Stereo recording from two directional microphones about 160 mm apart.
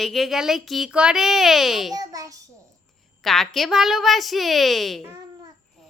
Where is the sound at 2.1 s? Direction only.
20° right (ahead or behind).